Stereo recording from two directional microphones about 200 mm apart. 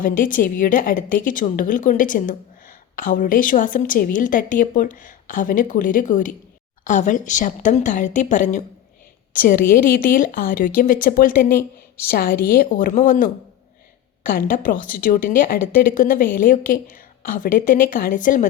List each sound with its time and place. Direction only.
0.0 s a woman's voice: 45° left (ahead or behind)